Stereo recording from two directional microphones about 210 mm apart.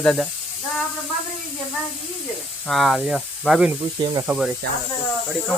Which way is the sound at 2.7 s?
Centre (ahead or behind).